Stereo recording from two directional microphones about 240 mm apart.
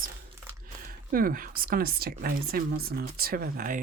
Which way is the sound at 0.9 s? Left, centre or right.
Right.